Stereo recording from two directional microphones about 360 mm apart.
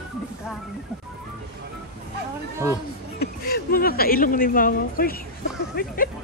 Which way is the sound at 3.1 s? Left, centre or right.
Left.